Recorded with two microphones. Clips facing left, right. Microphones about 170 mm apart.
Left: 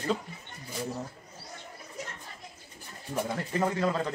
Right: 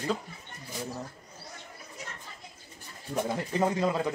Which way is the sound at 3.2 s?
20° right (ahead or behind).